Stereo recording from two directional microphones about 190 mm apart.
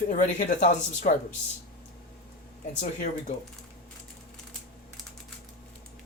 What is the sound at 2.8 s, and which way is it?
Speech, 45° left (ahead or behind).